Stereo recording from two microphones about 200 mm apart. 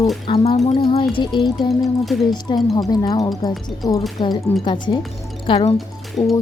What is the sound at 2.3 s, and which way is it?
A woman's voice, 20° left (ahead or behind).